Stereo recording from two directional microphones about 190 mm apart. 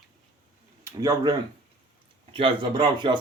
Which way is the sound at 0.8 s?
15° right (ahead or behind).